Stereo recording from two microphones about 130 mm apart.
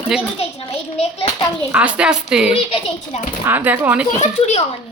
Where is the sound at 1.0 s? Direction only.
50° left (ahead or behind).